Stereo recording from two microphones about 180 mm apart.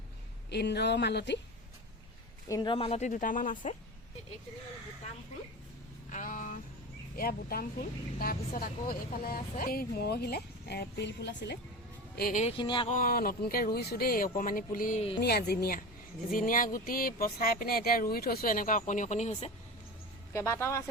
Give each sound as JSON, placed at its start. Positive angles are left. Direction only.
{"t": 0.5, "sound": "speech", "side_deg": 70}
{"t": 2.5, "sound": "a woman's voice", "side_deg": 25}
{"t": 6.1, "sound": "a sound", "side_deg": 45}
{"t": 7.2, "sound": "speech", "side_deg": 55}
{"t": 12.1, "sound": "speech", "side_deg": 55}
{"t": 12.4, "sound": "a sound", "side_deg": 30}
{"t": 12.9, "sound": "speech", "side_deg": 50}
{"t": 15.2, "sound": "speech", "side_deg": 60}
{"t": 16.3, "sound": "speech", "side_deg": 50}
{"t": 20.3, "sound": "speech", "side_deg": 15}